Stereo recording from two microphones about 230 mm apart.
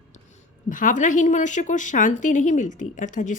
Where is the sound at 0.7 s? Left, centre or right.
Left.